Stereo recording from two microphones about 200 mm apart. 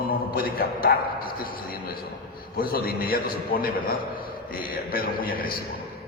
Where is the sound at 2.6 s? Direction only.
50° left (ahead or behind).